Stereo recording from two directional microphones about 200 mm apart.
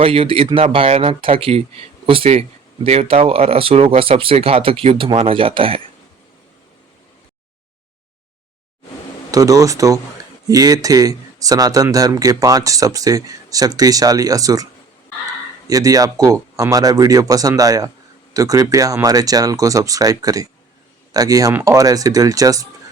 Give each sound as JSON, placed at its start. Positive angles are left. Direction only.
{"t": 0.0, "sound": "speech", "side_deg": -25}
{"t": 9.3, "sound": "speech", "side_deg": -15}